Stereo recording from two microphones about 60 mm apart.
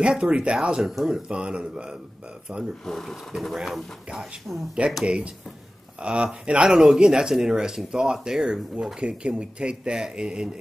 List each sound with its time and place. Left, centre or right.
0.0 s speech: centre
2.8 s speech: centre
5.0 s speech: centre